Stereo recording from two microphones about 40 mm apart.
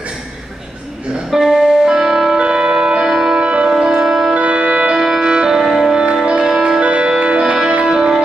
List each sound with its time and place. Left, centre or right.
1.3 s music: centre
2.3 s music: right
3.1 s music: centre
3.3 s music: right
3.7 s music: centre
4.4 s music: right
4.9 s music: centre
6.8 s music: right